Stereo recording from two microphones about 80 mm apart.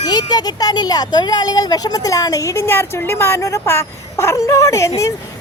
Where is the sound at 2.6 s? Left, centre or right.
Left.